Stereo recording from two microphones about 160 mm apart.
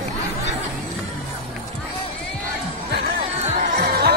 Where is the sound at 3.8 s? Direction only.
85° right.